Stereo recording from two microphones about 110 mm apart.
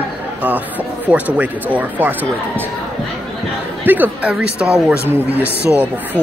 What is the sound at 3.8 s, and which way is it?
Speech, 15° right (ahead or behind).